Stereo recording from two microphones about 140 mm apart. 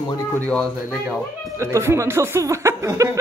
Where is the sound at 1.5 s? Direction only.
20° right (ahead or behind).